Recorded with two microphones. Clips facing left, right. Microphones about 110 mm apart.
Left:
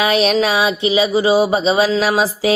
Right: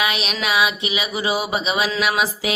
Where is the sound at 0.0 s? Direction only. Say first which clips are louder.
Left 9 dB; 35° left (ahead or behind).